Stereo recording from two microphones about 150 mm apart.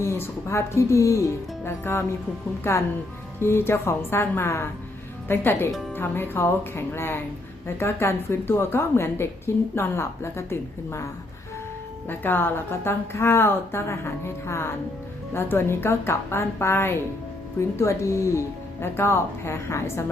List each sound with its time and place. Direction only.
0.0 s a woman's voice: 20° left (ahead or behind)